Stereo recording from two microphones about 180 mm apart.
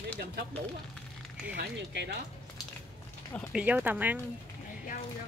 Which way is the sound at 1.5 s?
65° right (ahead or behind).